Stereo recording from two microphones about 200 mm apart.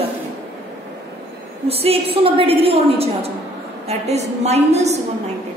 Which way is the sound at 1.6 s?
30° right (ahead or behind).